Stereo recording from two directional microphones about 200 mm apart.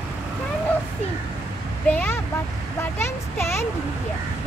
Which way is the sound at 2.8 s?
10° left (ahead or behind).